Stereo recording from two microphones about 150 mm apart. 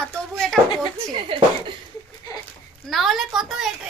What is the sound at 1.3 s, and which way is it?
Speech, 35° right (ahead or behind).